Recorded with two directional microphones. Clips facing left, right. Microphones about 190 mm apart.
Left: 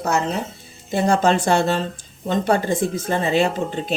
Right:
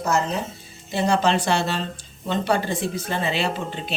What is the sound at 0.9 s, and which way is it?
Speech, 50° left (ahead or behind).